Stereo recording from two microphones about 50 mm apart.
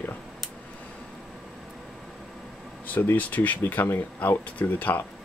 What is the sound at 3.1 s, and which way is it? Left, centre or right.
Speech, left.